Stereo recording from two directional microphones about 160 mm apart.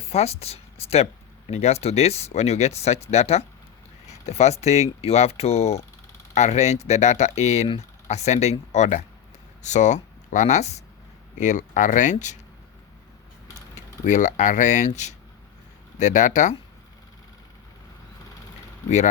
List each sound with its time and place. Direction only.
0.1 s speech: 40° left (ahead or behind)
14.0 s speech: 55° left (ahead or behind)